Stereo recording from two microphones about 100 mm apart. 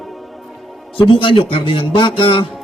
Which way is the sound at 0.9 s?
60° left (ahead or behind).